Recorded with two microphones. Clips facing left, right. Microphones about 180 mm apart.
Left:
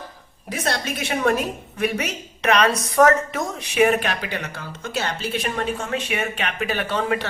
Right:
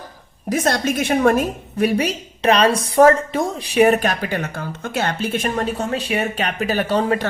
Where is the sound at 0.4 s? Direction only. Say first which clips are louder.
Right 7 dB; 45° right (ahead or behind).